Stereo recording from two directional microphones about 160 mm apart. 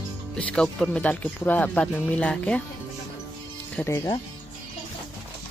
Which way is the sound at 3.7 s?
15° left (ahead or behind).